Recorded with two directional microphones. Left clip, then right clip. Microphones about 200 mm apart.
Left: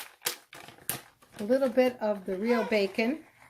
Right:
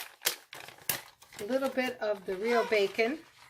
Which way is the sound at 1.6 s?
50° left (ahead or behind).